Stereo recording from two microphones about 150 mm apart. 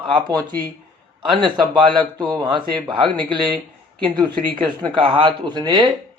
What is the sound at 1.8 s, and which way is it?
Speech, 30° right (ahead or behind).